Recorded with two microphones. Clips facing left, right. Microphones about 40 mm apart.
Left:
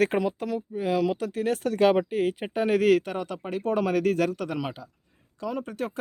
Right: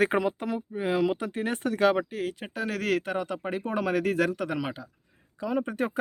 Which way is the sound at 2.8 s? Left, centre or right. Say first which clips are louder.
Left 5 dB; centre.